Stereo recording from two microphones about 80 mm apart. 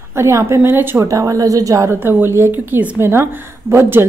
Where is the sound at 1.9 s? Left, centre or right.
Right.